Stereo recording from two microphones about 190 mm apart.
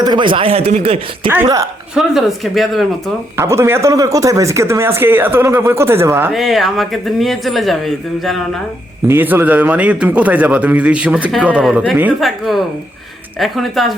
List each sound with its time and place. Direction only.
0.0 s speech: 25° right (ahead or behind)
1.3 s a man's voice: 15° right (ahead or behind)
2.0 s speech: centre (ahead or behind)
3.3 s a man's voice: 15° right (ahead or behind)
6.3 s speech: centre (ahead or behind)
9.0 s a man's voice: 10° right (ahead or behind)